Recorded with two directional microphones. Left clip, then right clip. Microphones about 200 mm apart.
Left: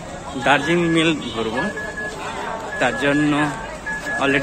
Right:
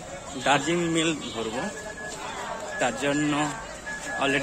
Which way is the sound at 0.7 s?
10° right (ahead or behind).